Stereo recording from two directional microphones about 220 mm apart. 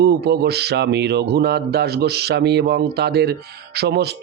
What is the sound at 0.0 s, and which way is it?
Speech, 45° right (ahead or behind).